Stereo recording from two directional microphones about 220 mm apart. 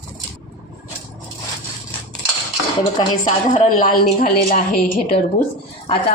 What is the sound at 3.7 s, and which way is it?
Speech, 40° left (ahead or behind).